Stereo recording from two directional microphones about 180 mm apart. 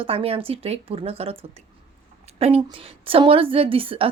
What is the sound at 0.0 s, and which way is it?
A woman's voice, 30° right (ahead or behind).